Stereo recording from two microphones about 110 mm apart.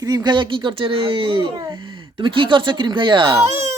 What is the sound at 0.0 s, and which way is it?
A child's voice, 35° right (ahead or behind).